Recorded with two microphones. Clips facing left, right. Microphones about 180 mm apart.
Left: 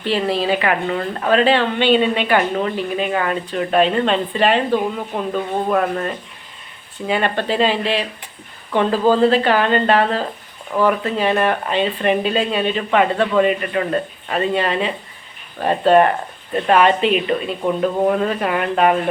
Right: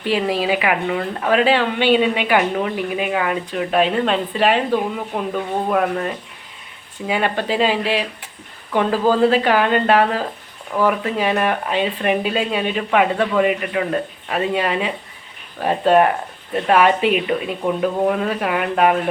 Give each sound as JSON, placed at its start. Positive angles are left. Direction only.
{"t": 0.0, "sound": "speech", "side_deg": -10}